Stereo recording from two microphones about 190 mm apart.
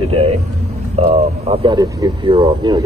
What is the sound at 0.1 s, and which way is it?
Vehicle, 30° right (ahead or behind).